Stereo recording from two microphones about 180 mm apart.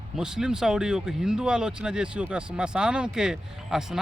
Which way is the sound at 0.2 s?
5° right (ahead or behind).